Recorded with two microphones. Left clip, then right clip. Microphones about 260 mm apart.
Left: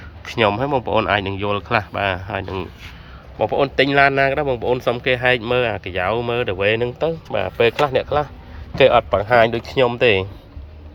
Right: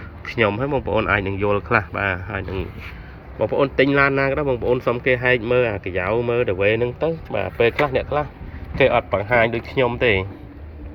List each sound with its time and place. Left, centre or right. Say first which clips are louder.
0.3 s speech: left 2 dB; centre